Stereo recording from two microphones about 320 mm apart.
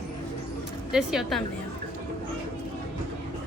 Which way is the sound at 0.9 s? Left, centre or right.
Centre.